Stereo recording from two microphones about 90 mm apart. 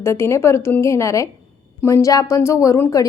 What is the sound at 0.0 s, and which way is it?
A woman's voice, 30° left (ahead or behind).